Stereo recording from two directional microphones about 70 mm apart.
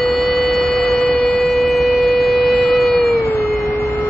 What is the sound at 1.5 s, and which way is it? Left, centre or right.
Siren, centre.